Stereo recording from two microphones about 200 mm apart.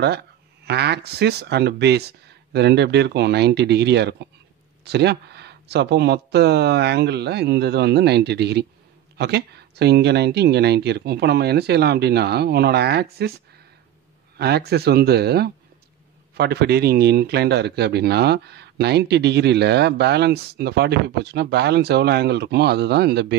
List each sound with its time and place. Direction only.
0.7 s speech: 55° right (ahead or behind)
14.3 s speech: 55° right (ahead or behind)